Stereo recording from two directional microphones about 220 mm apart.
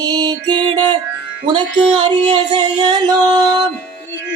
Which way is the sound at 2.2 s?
20° right (ahead or behind).